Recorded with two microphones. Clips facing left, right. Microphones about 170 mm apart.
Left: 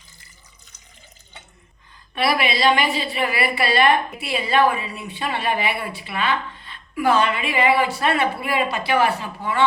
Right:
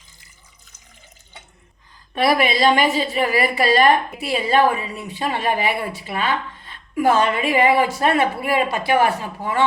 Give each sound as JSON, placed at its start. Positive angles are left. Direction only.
{"t": 2.1, "sound": "a woman's voice", "side_deg": -45}